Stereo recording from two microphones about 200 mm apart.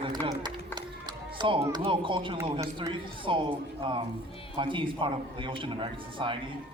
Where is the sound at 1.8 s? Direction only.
25° right (ahead or behind).